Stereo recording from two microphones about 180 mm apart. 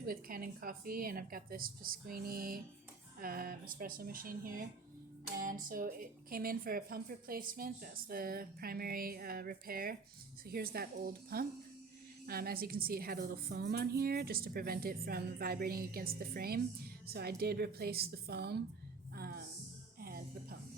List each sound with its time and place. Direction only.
0.0 s a woman's voice: 55° right (ahead or behind)
19.1 s music: 60° right (ahead or behind)